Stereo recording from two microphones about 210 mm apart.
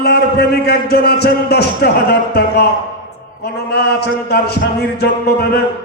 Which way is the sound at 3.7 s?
50° left (ahead or behind).